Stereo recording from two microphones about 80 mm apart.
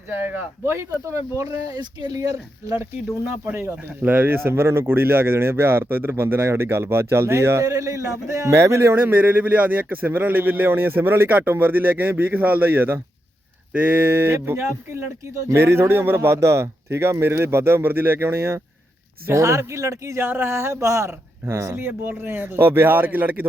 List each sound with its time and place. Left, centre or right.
0.1 s speech: right
1.8 s speech: right
2.1 s speech: right
3.2 s speech: right
9.0 s speech: right
20.2 s speech: right